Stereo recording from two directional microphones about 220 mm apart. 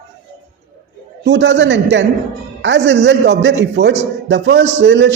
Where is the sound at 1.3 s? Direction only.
55° right (ahead or behind).